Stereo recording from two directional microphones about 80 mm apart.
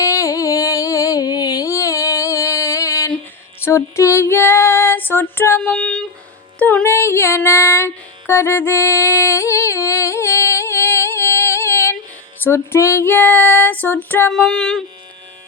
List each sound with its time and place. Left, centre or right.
0.0 s music: left
3.6 s female singing: left
5.5 s music: centre
6.8 s music: left
12.4 s female singing: left
14.3 s music: centre